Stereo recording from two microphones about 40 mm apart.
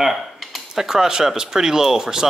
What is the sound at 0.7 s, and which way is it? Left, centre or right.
Speech, centre.